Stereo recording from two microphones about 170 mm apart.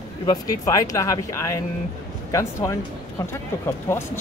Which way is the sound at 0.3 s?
20° left (ahead or behind).